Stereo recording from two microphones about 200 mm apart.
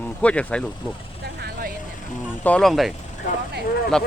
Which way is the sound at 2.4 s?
5° left (ahead or behind).